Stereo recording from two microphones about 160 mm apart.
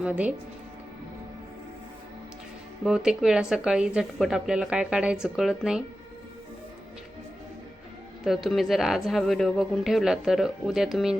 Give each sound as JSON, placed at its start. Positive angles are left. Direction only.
{"t": 0.0, "sound": "speech", "side_deg": -10}
{"t": 2.8, "sound": "a woman's voice", "side_deg": -5}
{"t": 8.2, "sound": "a woman's voice", "side_deg": 0}